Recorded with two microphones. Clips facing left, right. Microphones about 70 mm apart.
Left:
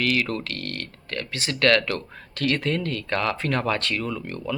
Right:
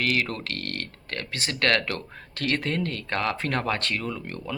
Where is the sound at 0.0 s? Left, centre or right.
Right.